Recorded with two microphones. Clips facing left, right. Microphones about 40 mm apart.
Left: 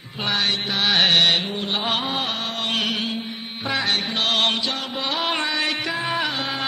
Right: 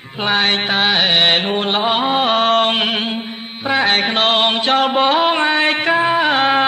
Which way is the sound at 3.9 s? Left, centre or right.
Right.